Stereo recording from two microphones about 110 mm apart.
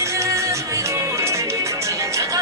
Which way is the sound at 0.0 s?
25° right (ahead or behind).